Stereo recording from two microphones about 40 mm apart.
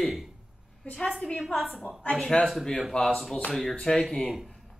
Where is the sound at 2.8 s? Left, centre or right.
Centre.